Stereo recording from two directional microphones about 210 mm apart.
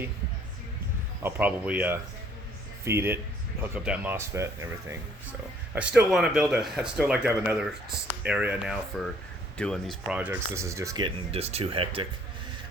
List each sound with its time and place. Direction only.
1.2 s speech: 5° right (ahead or behind); by 12.0 s 25° right (ahead or behind)